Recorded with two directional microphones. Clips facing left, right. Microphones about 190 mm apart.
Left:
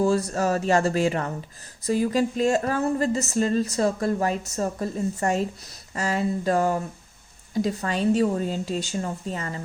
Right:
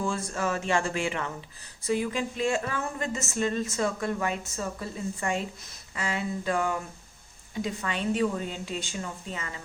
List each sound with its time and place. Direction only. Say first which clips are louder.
0.0 s speech: left 8 dB; 40° left (ahead or behind)